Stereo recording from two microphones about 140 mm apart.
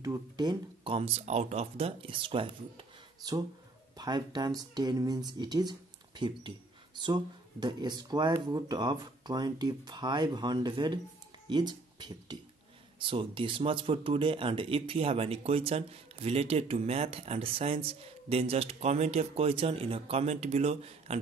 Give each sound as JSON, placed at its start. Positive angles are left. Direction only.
{"t": 0.0, "sound": "speech", "side_deg": -25}
{"t": 3.9, "sound": "speech", "side_deg": -30}
{"t": 7.6, "sound": "speech", "side_deg": -30}